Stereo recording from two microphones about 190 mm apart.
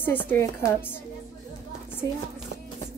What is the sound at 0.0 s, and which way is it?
Speech, 10° left (ahead or behind).